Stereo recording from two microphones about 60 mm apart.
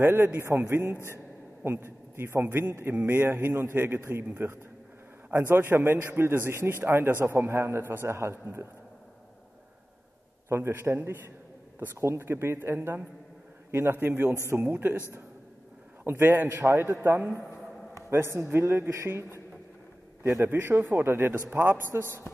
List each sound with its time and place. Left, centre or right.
0.0 s a man's voice: right
5.3 s a man's voice: right
10.5 s a man's voice: right
16.0 s a man's voice: right
16.4 s a man's voice: right
18.1 s a man's voice: right
20.4 s a man's voice: right